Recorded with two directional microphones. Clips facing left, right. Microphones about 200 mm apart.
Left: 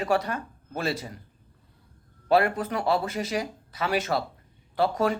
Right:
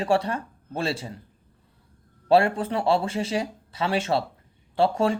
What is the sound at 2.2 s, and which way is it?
Speech, 30° right (ahead or behind).